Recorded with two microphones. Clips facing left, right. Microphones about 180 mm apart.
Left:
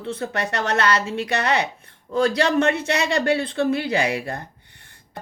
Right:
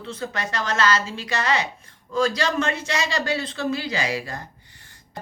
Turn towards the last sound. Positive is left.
turn(degrees=60)  # may be behind; listen again after turning